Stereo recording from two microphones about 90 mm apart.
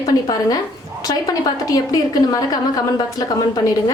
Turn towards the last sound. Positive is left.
turn(degrees=50)  # may be behind; listen again after turning